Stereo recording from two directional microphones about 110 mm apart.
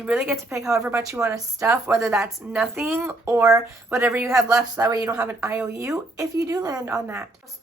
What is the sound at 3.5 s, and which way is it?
Speech, 25° right (ahead or behind).